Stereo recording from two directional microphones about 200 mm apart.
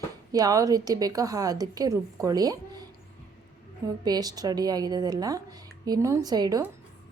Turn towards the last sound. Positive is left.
turn(degrees=-20)  # may be behind; listen again after turning